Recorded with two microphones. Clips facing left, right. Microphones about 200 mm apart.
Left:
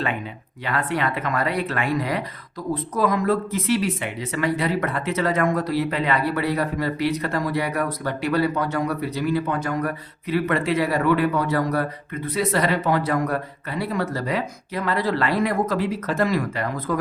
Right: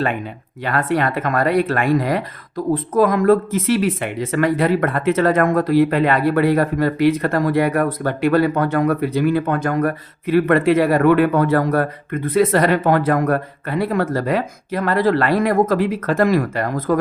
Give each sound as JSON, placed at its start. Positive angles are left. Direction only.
{"t": 0.6, "sound": "speech", "side_deg": -50}